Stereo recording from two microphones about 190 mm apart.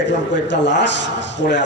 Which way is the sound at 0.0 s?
70° left (ahead or behind).